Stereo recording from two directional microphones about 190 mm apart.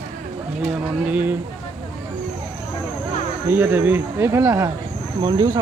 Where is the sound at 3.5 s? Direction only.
10° right (ahead or behind).